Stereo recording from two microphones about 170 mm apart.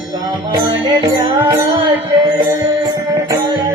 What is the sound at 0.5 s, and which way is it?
Music, 20° right (ahead or behind).